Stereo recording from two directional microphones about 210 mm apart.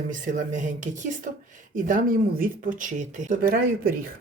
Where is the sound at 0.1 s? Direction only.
40° right (ahead or behind).